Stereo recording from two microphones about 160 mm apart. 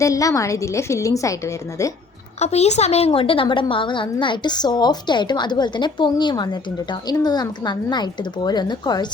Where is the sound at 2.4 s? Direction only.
45° left (ahead or behind).